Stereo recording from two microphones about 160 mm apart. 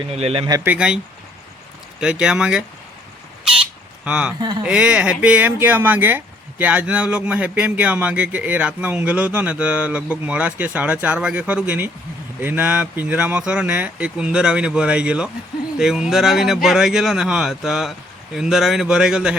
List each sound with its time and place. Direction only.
0.1 s speech: 40° right (ahead or behind)
0.4 s speech: 20° right (ahead or behind)
0.7 s speech: 5° right (ahead or behind)
2.0 s speech: 5° right (ahead or behind)
4.0 s speech: 5° right (ahead or behind)